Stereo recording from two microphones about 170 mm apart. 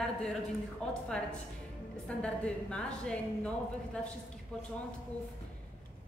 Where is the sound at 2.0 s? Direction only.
5° left (ahead or behind).